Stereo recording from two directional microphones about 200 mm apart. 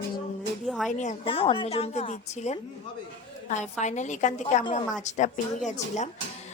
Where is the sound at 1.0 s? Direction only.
30° left (ahead or behind).